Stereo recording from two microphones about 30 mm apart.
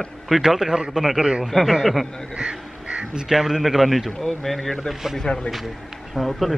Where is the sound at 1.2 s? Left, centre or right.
Right.